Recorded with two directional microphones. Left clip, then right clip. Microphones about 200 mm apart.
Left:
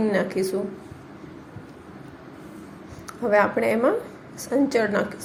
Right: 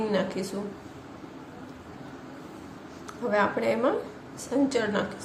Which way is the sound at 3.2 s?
25° left (ahead or behind).